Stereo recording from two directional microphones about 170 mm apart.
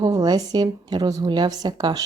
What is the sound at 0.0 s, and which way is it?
Speech, 25° right (ahead or behind).